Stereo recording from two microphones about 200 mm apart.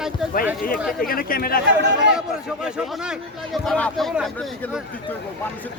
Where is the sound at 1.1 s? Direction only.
45° left (ahead or behind).